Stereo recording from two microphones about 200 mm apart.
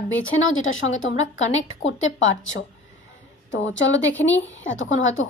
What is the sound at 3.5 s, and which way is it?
A woman's voice, 65° left (ahead or behind).